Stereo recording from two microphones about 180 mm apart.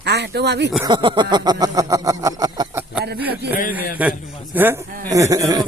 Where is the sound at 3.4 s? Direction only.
65° right (ahead or behind).